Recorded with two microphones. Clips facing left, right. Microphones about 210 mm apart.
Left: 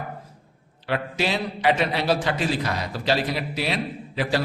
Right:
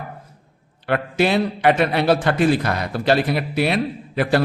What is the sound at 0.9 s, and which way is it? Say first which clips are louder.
A man's voice: right 6 dB; 55° right (ahead or behind).